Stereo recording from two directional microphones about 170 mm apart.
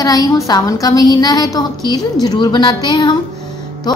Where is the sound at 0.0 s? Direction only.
20° left (ahead or behind).